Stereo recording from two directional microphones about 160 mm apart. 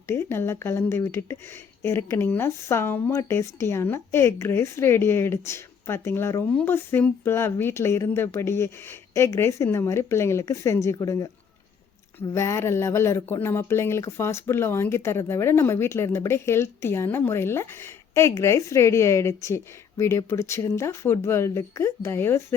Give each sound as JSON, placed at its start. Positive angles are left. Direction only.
{"t": 0.1, "sound": "speech", "side_deg": 15}
{"t": 12.3, "sound": "speech", "side_deg": 15}